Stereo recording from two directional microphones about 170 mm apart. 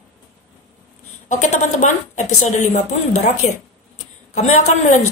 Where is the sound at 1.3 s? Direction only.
45° left (ahead or behind).